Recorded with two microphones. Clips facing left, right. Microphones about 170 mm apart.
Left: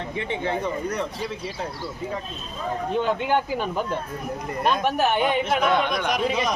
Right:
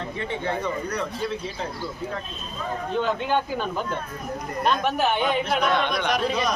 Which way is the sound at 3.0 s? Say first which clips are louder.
Left 1 dB; 15° left (ahead or behind).